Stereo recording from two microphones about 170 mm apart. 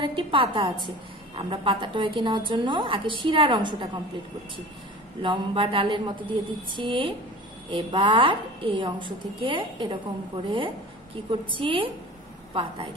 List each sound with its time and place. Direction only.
0.0 s a woman's voice: 30° right (ahead or behind)
5.2 s a woman's voice: 30° right (ahead or behind)